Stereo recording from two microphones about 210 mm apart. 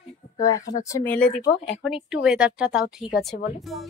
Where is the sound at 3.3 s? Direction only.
50° left (ahead or behind).